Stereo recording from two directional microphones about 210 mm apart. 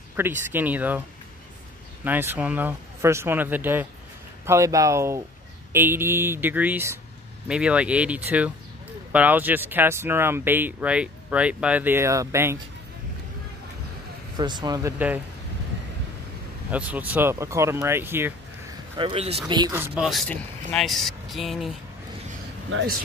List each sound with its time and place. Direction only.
0.1 s speech: 10° right (ahead or behind)
2.0 s speech: 10° right (ahead or behind)
14.3 s speech: 20° right (ahead or behind)
16.7 s speech: 5° right (ahead or behind)
18.9 s speech: 25° right (ahead or behind); by 21.7 s centre (ahead or behind)